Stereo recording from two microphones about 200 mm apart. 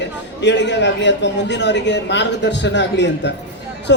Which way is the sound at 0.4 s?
60° left (ahead or behind).